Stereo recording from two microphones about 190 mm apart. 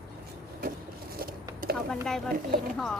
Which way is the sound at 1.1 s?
50° right (ahead or behind).